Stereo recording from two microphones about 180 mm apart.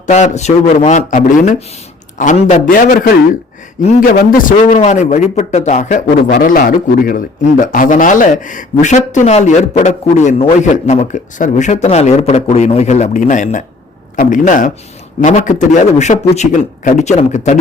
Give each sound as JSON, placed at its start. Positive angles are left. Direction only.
{"t": 0.1, "sound": "a man's voice", "side_deg": 40}
{"t": 4.2, "sound": "a man's voice", "side_deg": 50}
{"t": 6.3, "sound": "a man's voice", "side_deg": 50}